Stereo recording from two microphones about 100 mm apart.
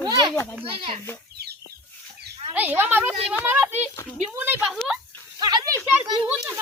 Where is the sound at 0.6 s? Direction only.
65° right (ahead or behind).